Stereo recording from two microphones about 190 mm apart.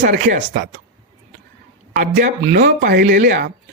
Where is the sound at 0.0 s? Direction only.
50° right (ahead or behind).